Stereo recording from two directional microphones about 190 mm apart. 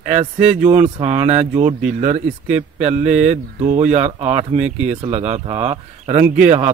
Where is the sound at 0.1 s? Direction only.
35° right (ahead or behind).